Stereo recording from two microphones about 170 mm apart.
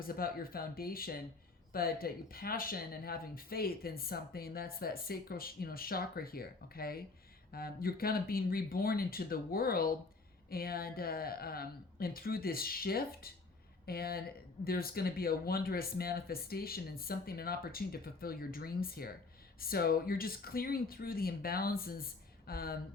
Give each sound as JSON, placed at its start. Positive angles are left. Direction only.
{"t": 0.0, "sound": "speech", "side_deg": 60}